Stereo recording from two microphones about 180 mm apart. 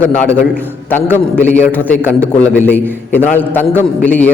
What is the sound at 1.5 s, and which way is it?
A man's voice, 10° left (ahead or behind).